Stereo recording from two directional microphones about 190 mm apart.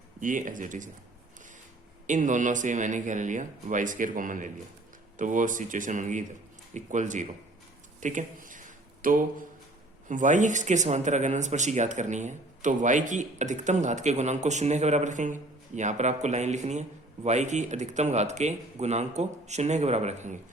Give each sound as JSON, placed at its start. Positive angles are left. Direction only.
{"t": 0.2, "sound": "speech", "side_deg": -45}
{"t": 2.0, "sound": "speech", "side_deg": -40}
{"t": 8.0, "sound": "a sound", "side_deg": -45}
{"t": 10.1, "sound": "speech", "side_deg": -40}